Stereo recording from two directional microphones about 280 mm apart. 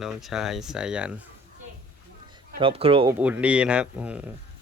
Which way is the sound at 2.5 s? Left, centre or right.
Centre.